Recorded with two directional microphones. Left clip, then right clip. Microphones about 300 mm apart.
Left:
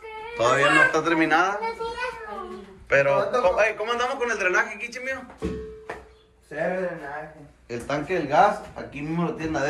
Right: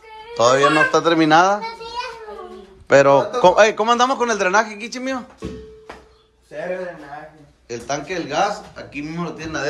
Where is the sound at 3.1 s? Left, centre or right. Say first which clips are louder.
Right 7 dB; right.